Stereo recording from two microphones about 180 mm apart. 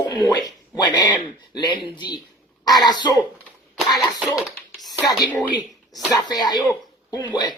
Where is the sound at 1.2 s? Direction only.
25° left (ahead or behind).